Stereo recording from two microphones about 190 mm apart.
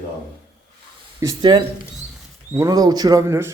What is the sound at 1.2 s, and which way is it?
Speech, 25° right (ahead or behind).